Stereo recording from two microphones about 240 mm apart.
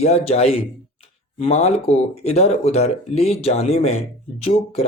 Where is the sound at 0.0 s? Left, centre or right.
Left.